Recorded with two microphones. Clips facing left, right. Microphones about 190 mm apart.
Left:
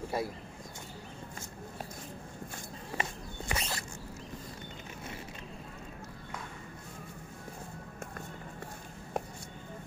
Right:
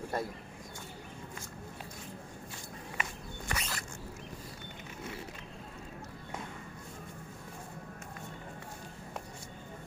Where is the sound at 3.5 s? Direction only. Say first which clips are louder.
Left 2 dB; 30° left (ahead or behind).